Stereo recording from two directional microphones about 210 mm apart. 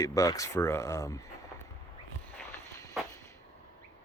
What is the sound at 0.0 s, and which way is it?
Speech, 15° left (ahead or behind).